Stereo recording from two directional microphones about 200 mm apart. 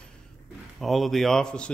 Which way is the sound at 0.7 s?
Centre (ahead or behind).